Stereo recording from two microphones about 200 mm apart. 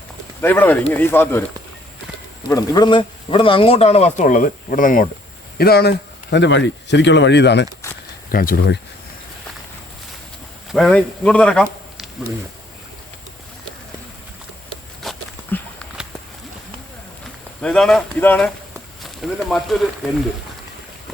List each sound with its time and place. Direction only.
0.4 s speech: 10° left (ahead or behind)
2.5 s speech: 20° left (ahead or behind); by 7.7 s 60° left (ahead or behind)
8.3 s speech: 45° left (ahead or behind)
10.7 s speech: 5° left (ahead or behind)
15.0 s walk: centre (ahead or behind)
17.6 s speech: 5° left (ahead or behind)